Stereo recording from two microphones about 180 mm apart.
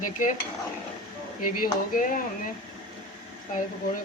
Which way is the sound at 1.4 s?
50° left (ahead or behind).